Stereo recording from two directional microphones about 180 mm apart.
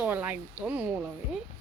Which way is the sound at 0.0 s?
10° right (ahead or behind).